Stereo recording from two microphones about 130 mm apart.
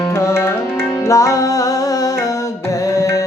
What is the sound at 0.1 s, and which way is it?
Tabla, 20° left (ahead or behind).